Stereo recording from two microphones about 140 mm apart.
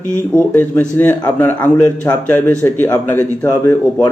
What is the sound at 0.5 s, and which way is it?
A man's voice, 15° left (ahead or behind).